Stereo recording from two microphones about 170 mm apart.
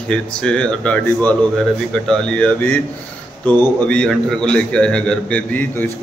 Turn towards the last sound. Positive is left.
turn(degrees=10)  # may be behind; listen again after turning